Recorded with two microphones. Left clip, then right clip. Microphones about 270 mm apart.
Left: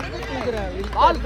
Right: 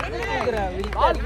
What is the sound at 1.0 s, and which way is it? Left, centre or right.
Speech, left.